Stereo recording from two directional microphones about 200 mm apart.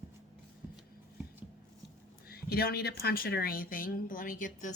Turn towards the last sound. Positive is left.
turn(degrees=40)  # may be behind; listen again after turning